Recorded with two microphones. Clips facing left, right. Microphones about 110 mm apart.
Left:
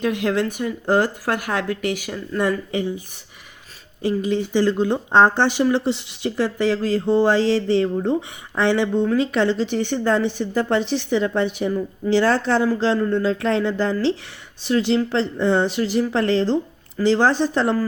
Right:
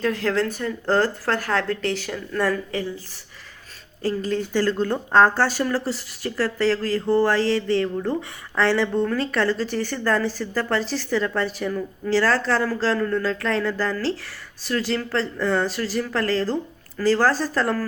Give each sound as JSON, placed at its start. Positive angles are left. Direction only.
{"t": 0.0, "sound": "speech", "side_deg": 15}
{"t": 4.0, "sound": "speech", "side_deg": 10}